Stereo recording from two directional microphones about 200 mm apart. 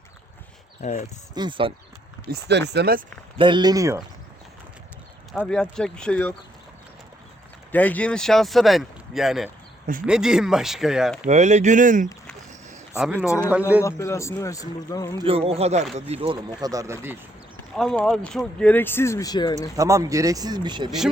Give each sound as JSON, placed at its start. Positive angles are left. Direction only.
{"t": 0.8, "sound": "speech", "side_deg": 35}
{"t": 1.4, "sound": "speech", "side_deg": -25}
{"t": 2.3, "sound": "speech", "side_deg": -60}
{"t": 3.3, "sound": "speech", "side_deg": -25}
{"t": 5.3, "sound": "speech", "side_deg": 5}
{"t": 7.7, "sound": "speech", "side_deg": 10}
{"t": 11.3, "sound": "speech", "side_deg": -35}
{"t": 13.1, "sound": "speech", "side_deg": 10}
{"t": 13.5, "sound": "speech", "side_deg": -10}
{"t": 13.8, "sound": "speech", "side_deg": 15}
{"t": 15.2, "sound": "speech", "side_deg": -30}
{"t": 17.7, "sound": "speech", "side_deg": 0}
{"t": 19.7, "sound": "speech", "side_deg": -15}